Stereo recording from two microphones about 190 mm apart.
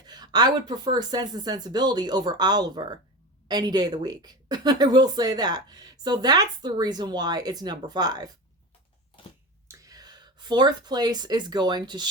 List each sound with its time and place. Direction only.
0.0 s a woman's voice: 20° right (ahead or behind)
9.6 s speech: 15° right (ahead or behind)